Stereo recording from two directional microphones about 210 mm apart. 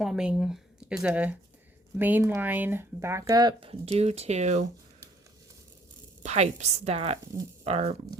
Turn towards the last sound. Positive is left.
turn(degrees=-30)  # may be behind; listen again after turning